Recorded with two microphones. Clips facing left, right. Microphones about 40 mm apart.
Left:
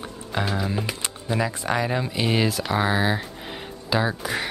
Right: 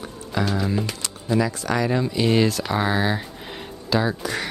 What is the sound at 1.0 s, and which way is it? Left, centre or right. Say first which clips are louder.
Speech: right 4 dB; left.